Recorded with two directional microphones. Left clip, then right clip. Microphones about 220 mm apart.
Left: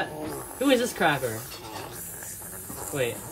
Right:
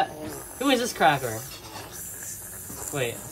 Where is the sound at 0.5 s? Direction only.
15° right (ahead or behind).